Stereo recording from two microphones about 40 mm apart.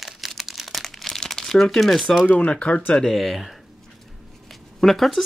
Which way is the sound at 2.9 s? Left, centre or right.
Centre.